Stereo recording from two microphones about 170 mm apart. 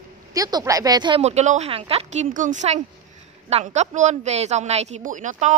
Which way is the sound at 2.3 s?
45° right (ahead or behind).